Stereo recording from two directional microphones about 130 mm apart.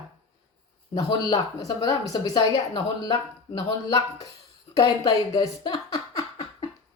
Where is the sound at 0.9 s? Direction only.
30° left (ahead or behind).